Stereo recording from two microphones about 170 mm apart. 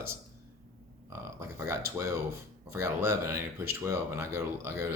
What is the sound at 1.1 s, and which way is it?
Speech, 15° right (ahead or behind).